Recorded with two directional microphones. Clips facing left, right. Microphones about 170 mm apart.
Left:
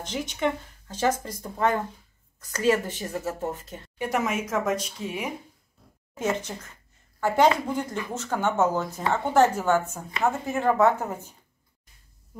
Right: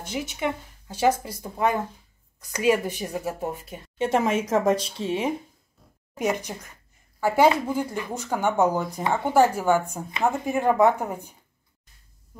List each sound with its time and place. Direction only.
0.0 s speech: 10° right (ahead or behind)
4.0 s speech: 30° right (ahead or behind)
6.1 s speech: 15° right (ahead or behind)